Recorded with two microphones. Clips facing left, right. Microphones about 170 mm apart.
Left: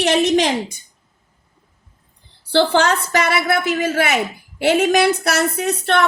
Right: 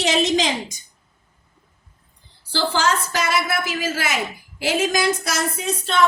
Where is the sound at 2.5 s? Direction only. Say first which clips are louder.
Left 6 dB; 65° left (ahead or behind).